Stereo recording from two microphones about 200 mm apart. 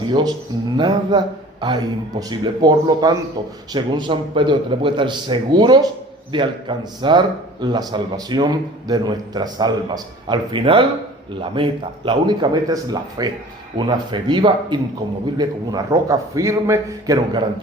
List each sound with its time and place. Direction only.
0.0 s a man's voice: 20° right (ahead or behind)